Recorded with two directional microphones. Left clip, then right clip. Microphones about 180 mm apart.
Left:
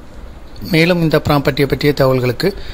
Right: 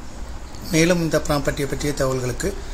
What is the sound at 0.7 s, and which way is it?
Speech, 50° left (ahead or behind).